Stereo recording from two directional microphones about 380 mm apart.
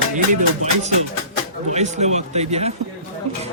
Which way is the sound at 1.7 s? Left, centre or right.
Centre.